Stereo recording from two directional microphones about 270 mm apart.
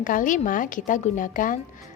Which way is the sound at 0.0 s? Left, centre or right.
Left.